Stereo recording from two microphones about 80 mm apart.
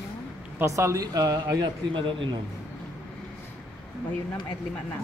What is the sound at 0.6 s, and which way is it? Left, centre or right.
Speech, right.